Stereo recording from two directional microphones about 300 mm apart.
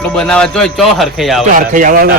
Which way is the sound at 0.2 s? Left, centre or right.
Centre.